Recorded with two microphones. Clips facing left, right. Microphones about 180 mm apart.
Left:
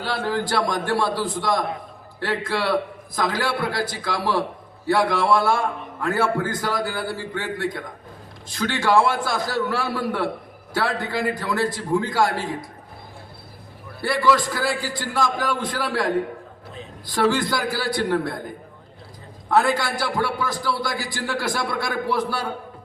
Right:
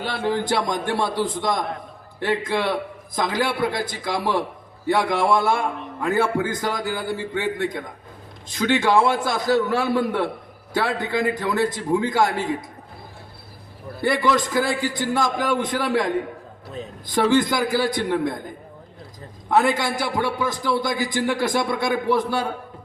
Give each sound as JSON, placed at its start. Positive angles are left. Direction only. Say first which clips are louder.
{"t": 0.0, "sound": "a man's voice", "louder": "right 1 dB", "side_deg": -20}
{"t": 14.0, "sound": "a man's voice", "louder": "even", "side_deg": -20}
{"t": 17.1, "sound": "a man's voice", "louder": "right 2 dB", "side_deg": -20}
{"t": 19.5, "sound": "a man's voice", "louder": "right 1 dB", "side_deg": -20}